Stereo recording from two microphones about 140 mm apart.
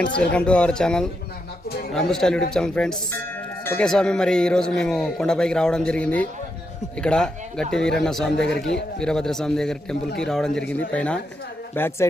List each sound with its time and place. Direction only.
0.0 s a man's voice: 10° left (ahead or behind)
3.6 s music: 15° left (ahead or behind)
3.8 s a man's voice: 5° left (ahead or behind)